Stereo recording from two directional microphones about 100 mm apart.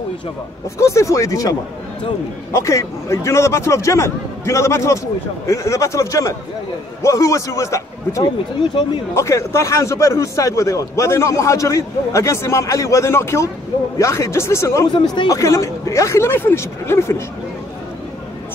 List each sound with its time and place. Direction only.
0.7 s a man's voice: 30° left (ahead or behind)
2.5 s a man's voice: 30° left (ahead or behind)